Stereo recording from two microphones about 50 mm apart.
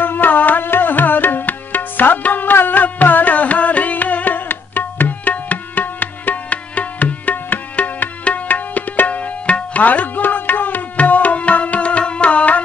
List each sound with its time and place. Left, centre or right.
0.0 s music: left